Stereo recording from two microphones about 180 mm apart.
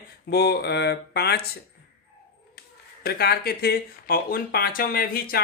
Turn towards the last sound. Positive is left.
turn(degrees=55)  # may be behind; listen again after turning